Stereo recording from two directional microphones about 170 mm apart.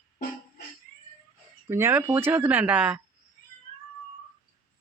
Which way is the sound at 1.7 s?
15° right (ahead or behind).